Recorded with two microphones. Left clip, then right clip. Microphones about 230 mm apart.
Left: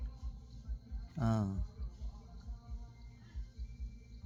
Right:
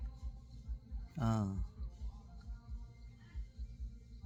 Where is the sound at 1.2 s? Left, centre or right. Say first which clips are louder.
Left 2 dB; centre.